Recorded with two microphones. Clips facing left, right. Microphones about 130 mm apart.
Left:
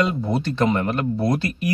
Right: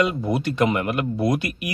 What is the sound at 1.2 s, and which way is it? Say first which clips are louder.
Speech: even; 25° left (ahead or behind).